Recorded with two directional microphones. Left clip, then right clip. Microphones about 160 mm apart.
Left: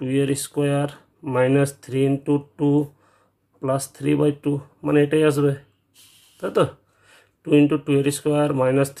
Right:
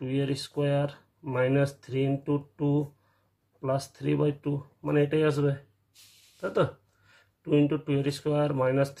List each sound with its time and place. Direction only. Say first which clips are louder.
0.0 s speech: left 8 dB; 25° left (ahead or behind)